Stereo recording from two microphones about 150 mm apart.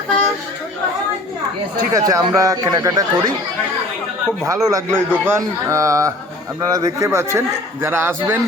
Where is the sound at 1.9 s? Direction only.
25° right (ahead or behind).